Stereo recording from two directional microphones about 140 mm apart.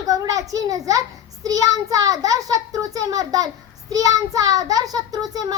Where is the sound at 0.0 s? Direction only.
25° right (ahead or behind).